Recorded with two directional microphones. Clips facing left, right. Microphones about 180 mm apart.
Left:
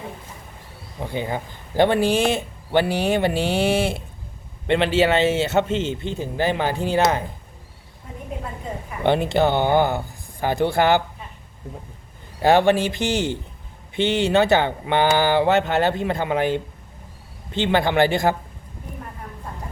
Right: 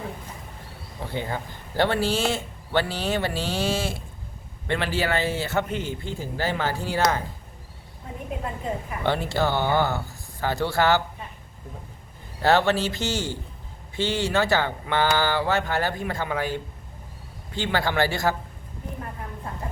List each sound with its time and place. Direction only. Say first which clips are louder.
0.9 s a man's voice: left 4 dB; 15° left (ahead or behind)
9.0 s a man's voice: left 6 dB; 20° left (ahead or behind)
12.4 s a man's voice: left 4 dB; 15° left (ahead or behind)